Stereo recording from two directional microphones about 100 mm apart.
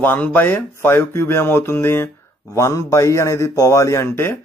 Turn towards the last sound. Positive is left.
turn(degrees=25)  # may be behind; listen again after turning